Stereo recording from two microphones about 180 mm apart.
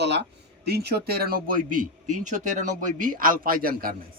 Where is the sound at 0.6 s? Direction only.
60° right (ahead or behind).